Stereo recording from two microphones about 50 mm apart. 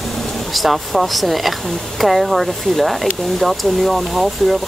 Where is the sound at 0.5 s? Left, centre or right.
Centre.